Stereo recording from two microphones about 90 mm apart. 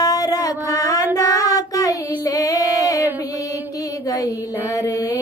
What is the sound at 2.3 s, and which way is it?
Female singing, 40° left (ahead or behind).